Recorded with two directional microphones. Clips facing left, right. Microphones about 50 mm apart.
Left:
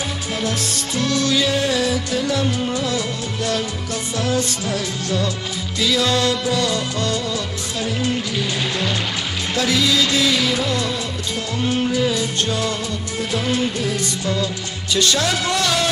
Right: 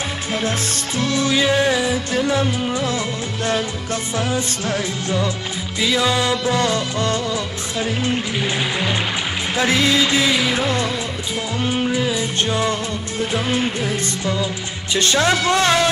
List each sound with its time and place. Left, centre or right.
0.5 s speech: right
1.1 s speech: right
6.5 s speech: right
11.9 s speech: right
14.4 s speech: right